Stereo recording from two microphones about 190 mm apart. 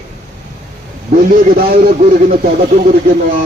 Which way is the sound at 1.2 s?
50° right (ahead or behind).